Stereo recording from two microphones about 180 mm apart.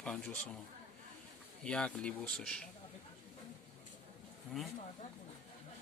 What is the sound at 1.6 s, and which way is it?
Speech, 5° left (ahead or behind).